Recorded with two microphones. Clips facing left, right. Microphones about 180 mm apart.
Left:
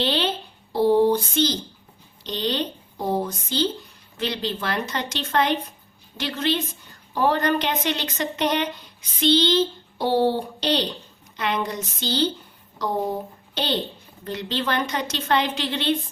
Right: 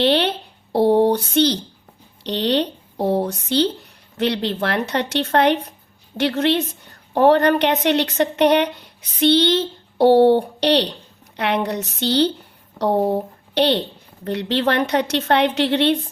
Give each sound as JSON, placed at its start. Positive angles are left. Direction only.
{"t": 0.0, "sound": "speech", "side_deg": -65}